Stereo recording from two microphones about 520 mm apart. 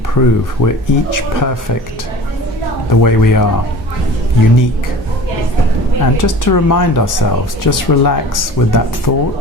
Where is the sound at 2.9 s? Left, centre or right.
Left.